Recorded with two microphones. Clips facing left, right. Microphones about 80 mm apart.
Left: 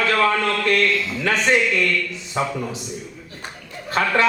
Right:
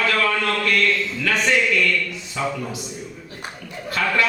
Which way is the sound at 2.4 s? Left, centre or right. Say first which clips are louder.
Left 2 dB; left.